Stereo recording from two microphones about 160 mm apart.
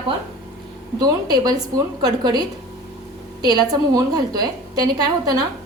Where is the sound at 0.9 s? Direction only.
25° right (ahead or behind).